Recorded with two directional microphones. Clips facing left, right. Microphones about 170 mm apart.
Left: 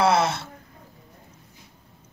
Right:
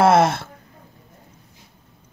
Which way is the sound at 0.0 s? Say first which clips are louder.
Right 5 dB; 50° right (ahead or behind).